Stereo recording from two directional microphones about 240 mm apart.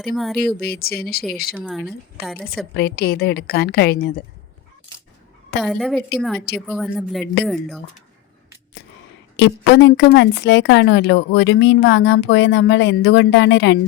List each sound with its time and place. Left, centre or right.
0.0 s speech: centre
0.3 s a woman's voice: left
5.6 s speech: centre
9.3 s a woman's voice: left